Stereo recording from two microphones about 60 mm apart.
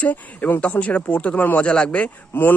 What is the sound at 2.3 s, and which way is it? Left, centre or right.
Speech, left.